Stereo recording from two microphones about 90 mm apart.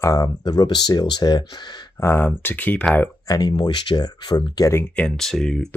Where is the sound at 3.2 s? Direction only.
50° left (ahead or behind).